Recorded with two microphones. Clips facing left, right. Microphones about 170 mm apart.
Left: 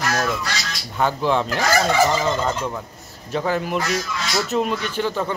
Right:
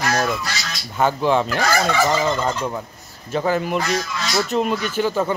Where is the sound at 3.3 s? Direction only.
Centre (ahead or behind).